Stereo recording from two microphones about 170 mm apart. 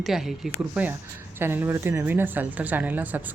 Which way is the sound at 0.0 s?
Centre (ahead or behind).